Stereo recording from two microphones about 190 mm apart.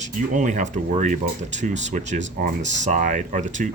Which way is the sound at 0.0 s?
40° right (ahead or behind).